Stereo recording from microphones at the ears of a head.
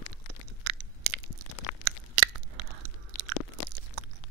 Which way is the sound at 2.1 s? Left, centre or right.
Right.